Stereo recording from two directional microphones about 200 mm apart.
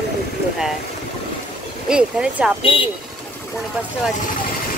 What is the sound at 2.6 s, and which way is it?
Speech, 25° left (ahead or behind).